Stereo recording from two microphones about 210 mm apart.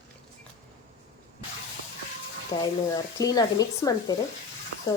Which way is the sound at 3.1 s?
15° left (ahead or behind).